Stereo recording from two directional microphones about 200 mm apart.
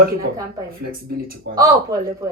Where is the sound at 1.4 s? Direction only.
50° right (ahead or behind).